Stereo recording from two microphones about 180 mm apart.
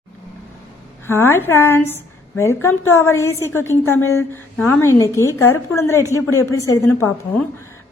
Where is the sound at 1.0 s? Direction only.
15° left (ahead or behind).